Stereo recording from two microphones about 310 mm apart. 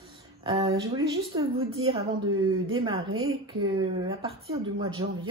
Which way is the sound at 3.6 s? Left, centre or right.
Centre.